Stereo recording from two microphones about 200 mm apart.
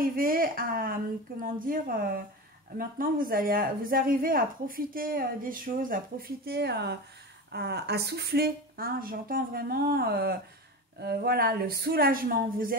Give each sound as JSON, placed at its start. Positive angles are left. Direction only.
{"t": 0.0, "sound": "speech", "side_deg": -45}